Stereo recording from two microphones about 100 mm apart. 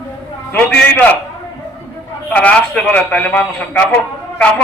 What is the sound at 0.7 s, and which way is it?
Speech, 15° left (ahead or behind).